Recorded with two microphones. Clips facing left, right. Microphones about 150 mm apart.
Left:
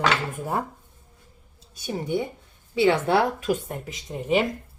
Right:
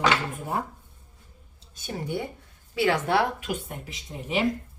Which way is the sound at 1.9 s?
20° left (ahead or behind).